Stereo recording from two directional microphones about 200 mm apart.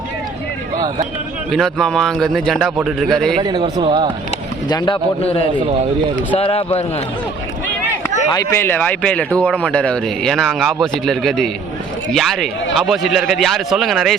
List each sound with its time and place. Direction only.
1.5 s speech: centre (ahead or behind)
3.3 s a man's voice: 25° right (ahead or behind)
4.7 s a man's voice: 25° left (ahead or behind)
8.3 s speech: 15° left (ahead or behind); by 14.2 s centre (ahead or behind)